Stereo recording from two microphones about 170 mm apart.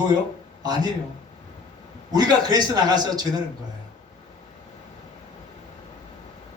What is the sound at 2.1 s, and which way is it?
A man's voice, 20° right (ahead or behind).